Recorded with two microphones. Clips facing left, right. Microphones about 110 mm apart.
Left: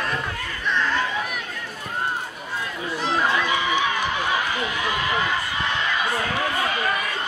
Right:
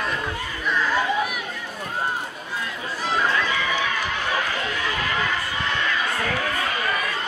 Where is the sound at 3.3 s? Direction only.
20° left (ahead or behind).